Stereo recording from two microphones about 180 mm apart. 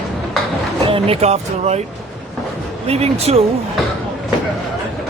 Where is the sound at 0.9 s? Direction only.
30° right (ahead or behind).